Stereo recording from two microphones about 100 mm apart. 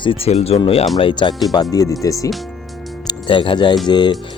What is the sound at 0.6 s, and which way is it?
Speech, 65° left (ahead or behind).